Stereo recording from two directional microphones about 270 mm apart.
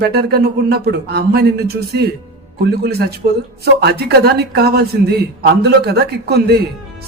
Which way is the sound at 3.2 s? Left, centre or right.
Right.